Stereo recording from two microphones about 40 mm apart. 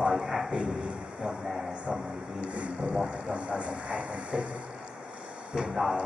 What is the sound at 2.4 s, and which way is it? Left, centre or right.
Music, right.